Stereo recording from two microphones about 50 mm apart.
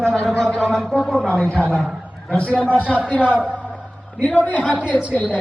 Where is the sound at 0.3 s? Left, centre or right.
Centre.